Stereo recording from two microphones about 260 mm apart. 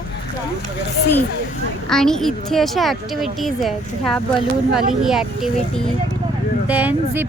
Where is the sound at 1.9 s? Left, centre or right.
Centre.